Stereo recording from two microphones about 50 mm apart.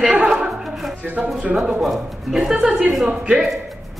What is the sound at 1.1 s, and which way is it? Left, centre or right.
Speech, right.